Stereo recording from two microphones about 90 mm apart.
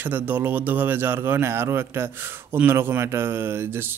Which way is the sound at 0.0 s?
20° right (ahead or behind).